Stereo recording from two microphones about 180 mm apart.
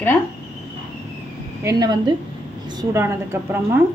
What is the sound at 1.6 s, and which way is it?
A woman's voice, 20° right (ahead or behind).